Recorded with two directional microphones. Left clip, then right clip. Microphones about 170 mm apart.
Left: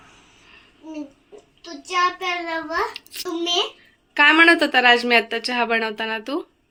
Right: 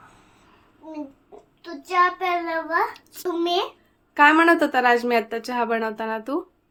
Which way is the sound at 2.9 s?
5° right (ahead or behind).